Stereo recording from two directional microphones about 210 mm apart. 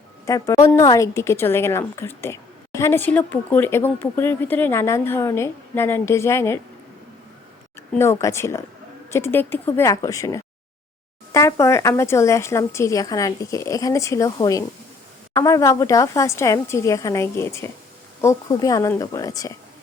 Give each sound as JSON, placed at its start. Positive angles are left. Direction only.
{"t": 0.3, "sound": "a woman's voice", "side_deg": 15}
{"t": 7.9, "sound": "a woman's voice", "side_deg": 15}